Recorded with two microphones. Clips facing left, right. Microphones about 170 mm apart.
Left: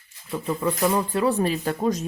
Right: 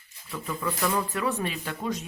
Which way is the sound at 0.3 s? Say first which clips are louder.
Left 6 dB; 35° left (ahead or behind).